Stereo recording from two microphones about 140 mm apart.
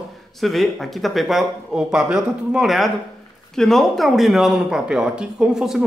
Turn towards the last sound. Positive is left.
turn(degrees=-5)  # may be behind; listen again after turning